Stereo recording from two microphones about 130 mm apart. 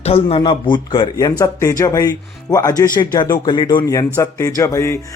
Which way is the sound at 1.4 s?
25° left (ahead or behind).